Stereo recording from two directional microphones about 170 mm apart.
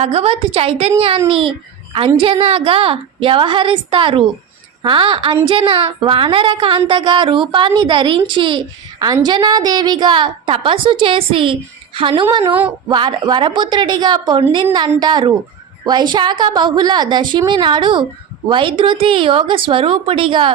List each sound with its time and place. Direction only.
0.0 s a child's voice: 35° right (ahead or behind)